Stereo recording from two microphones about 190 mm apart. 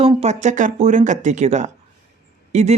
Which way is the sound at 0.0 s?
30° right (ahead or behind).